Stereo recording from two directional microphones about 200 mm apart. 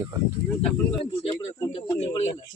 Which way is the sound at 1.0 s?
30° left (ahead or behind).